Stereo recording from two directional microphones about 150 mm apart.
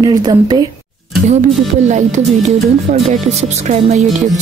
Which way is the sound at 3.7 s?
50° right (ahead or behind).